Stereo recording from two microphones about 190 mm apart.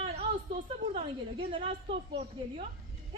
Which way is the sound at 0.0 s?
30° right (ahead or behind).